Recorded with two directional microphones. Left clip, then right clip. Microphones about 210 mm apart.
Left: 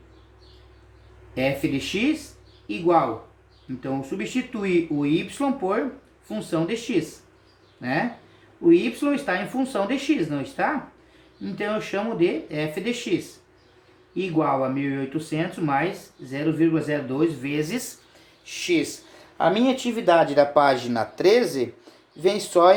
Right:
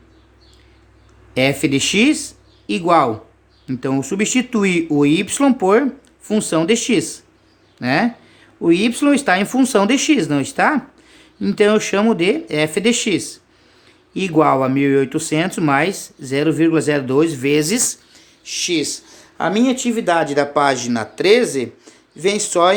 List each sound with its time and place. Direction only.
1.3 s speech: 55° right (ahead or behind)
18.4 s speech: 35° right (ahead or behind)
22.5 s speech: 30° right (ahead or behind)